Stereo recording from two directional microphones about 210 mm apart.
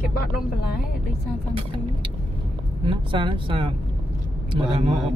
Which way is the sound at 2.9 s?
25° right (ahead or behind).